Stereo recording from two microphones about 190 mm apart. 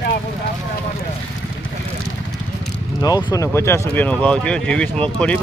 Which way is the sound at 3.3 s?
15° left (ahead or behind).